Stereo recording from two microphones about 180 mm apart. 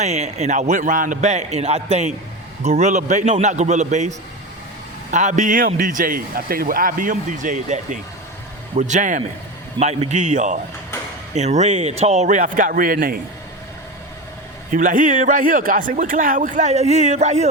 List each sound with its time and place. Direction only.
0.0 s a man's voice: 40° right (ahead or behind)
5.1 s a man's voice: 45° right (ahead or behind)
14.7 s a man's voice: 45° right (ahead or behind)